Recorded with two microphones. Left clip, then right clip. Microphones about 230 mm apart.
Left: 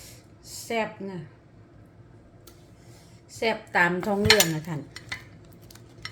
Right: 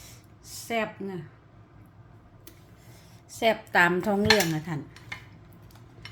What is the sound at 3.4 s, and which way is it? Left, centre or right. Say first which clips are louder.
Dishes: right 1 dB; right.